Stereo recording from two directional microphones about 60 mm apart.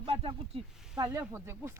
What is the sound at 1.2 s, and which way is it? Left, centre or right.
Speech, right.